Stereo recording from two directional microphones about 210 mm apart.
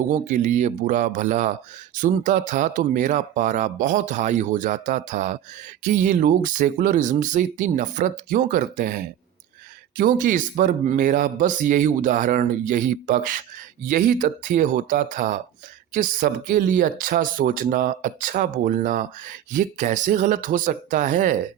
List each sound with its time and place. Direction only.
0.1 s speech: 35° right (ahead or behind)
10.0 s speech: 40° right (ahead or behind)